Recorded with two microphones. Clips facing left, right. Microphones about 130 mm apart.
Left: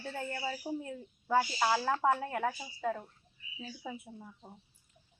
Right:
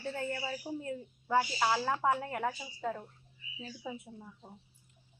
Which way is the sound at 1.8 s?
5° right (ahead or behind).